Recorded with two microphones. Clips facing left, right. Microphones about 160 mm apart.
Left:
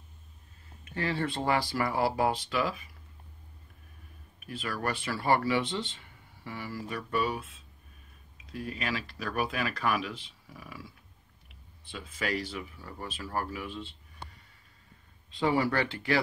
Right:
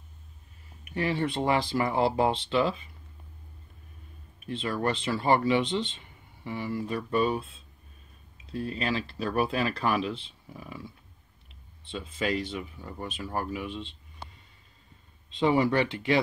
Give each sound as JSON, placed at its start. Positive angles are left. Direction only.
{"t": 0.8, "sound": "speech", "side_deg": -20}
{"t": 4.5, "sound": "speech", "side_deg": -25}